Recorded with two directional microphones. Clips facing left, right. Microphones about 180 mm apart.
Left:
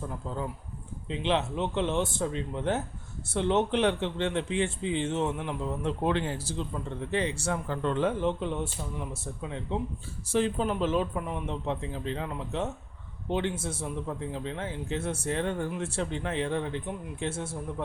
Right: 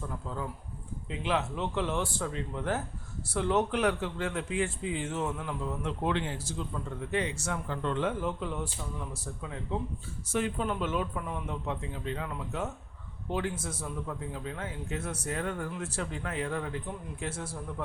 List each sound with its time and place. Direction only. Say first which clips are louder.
1.1 s speech: left 3 dB; 25° left (ahead or behind)
6.1 s speech: left 1 dB; 35° left (ahead or behind)
8.2 s speech: left 4 dB; 25° left (ahead or behind)